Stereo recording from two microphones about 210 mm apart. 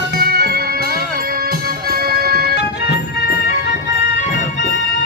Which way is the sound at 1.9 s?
45° right (ahead or behind).